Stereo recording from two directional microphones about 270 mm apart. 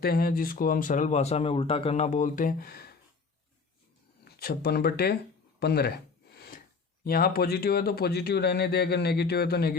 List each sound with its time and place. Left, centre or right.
0.0 s speech: left
4.2 s speech: left
6.3 s a sound: left
7.0 s speech: left